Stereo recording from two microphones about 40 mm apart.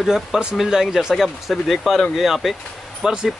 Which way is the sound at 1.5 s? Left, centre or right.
Centre.